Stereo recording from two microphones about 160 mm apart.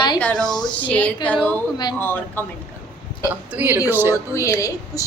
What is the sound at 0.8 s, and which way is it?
A man's voice, 10° left (ahead or behind).